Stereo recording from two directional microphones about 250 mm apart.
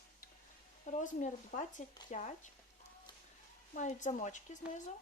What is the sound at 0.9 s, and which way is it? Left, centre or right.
A woman's voice, left.